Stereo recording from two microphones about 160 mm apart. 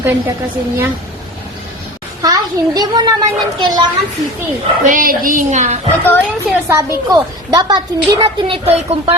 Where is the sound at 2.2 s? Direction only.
25° right (ahead or behind).